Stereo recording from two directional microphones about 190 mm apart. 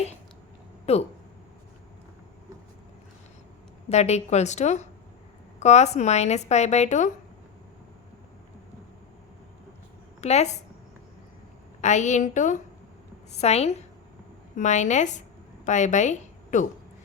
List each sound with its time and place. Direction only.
0.9 s speech: 35° left (ahead or behind)
3.8 s speech: 35° left (ahead or behind)
10.2 s a woman's voice: 35° left (ahead or behind)
11.8 s a woman's voice: 40° left (ahead or behind)